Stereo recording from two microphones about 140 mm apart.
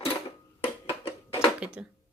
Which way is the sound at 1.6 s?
10° right (ahead or behind).